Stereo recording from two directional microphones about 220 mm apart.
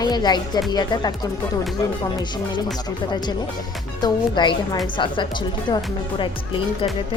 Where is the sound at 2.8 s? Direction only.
20° left (ahead or behind).